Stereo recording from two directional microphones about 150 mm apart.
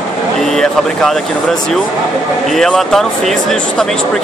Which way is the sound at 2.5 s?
Centre (ahead or behind).